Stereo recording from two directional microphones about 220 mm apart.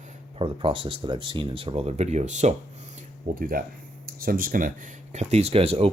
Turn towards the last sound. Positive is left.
turn(degrees=-25)  # may be behind; listen again after turning